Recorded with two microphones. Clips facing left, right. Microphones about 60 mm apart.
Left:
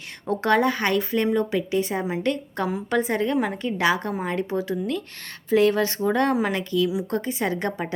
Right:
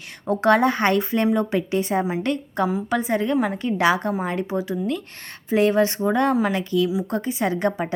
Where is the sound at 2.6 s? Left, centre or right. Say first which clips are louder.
Right 1 dB; centre.